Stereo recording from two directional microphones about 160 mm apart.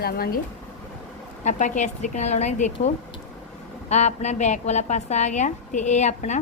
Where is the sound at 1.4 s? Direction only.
50° left (ahead or behind).